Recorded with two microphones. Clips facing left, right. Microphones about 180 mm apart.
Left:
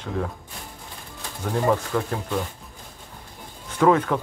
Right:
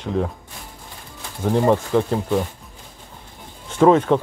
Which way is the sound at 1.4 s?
20° right (ahead or behind).